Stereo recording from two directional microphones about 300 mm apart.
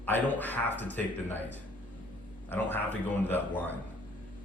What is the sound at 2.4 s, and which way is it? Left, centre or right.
Speech, centre.